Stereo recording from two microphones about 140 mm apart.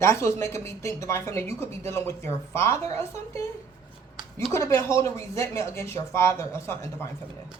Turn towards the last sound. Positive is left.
turn(degrees=20)  # may be behind; listen again after turning